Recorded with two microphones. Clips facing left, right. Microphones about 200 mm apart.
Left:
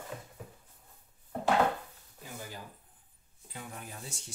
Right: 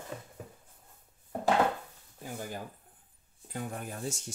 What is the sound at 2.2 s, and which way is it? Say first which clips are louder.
Speech: right 5 dB; 50° right (ahead or behind).